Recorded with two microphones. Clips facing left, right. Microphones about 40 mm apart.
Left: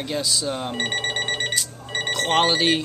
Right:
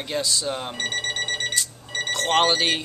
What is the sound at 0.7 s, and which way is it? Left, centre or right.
Alarm, left.